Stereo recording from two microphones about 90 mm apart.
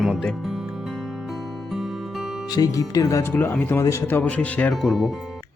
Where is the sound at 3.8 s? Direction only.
30° left (ahead or behind); by 4.7 s 15° left (ahead or behind).